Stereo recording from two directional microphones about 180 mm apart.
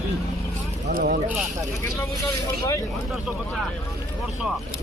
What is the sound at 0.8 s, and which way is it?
Speech, 45° right (ahead or behind).